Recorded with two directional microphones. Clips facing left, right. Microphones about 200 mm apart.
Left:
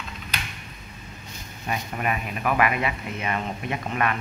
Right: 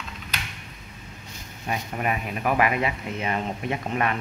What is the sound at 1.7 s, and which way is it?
A man's voice, 30° right (ahead or behind).